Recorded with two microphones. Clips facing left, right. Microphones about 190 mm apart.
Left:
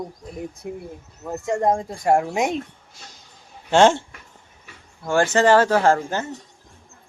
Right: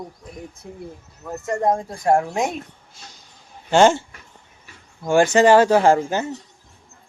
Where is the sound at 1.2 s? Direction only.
20° left (ahead or behind).